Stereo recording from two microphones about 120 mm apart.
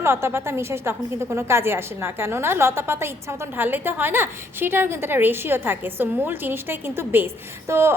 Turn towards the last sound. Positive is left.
turn(degrees=-20)  # may be behind; listen again after turning